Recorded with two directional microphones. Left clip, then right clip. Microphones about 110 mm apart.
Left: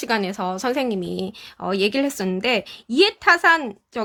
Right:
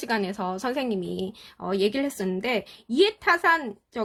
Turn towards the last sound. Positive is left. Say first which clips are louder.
# left 5 dB
turn(degrees=35)  # may be behind; listen again after turning